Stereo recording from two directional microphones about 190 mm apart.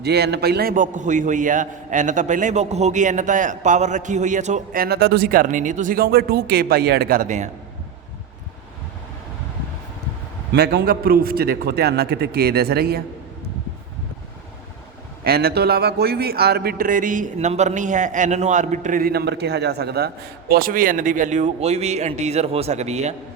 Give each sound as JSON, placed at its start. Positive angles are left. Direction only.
{"t": 0.0, "sound": "a man's voice", "side_deg": -60}
{"t": 10.5, "sound": "a man's voice", "side_deg": -60}
{"t": 15.2, "sound": "a man's voice", "side_deg": -55}